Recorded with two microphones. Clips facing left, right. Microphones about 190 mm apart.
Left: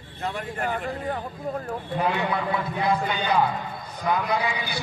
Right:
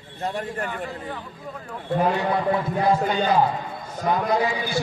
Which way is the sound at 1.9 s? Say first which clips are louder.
Right 4 dB; 40° right (ahead or behind).